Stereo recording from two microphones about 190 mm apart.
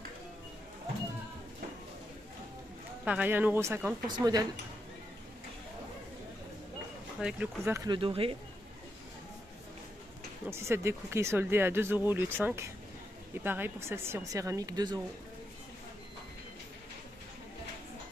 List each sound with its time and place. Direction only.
3.1 s speech: 10° right (ahead or behind)
7.2 s speech: 5° right (ahead or behind); by 8.4 s 30° right (ahead or behind)
10.4 s speech: 15° right (ahead or behind)